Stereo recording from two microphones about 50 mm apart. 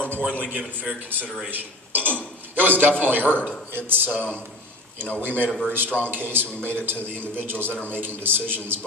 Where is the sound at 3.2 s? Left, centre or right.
Left.